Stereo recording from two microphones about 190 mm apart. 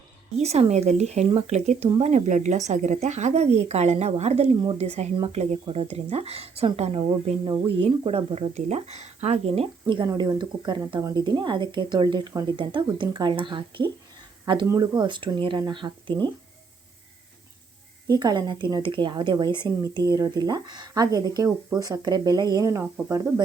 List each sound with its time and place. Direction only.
0.3 s speech: 35° right (ahead or behind)
18.1 s speech: 20° right (ahead or behind)